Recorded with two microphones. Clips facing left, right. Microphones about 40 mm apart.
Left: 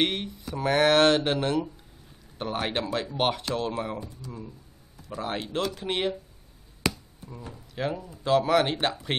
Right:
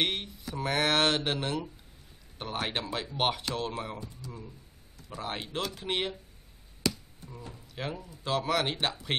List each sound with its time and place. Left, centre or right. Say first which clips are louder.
0.0 s speech: left 4 dB; centre
6.8 s a sound: left 3 dB; left
7.7 s speech: left 7 dB; centre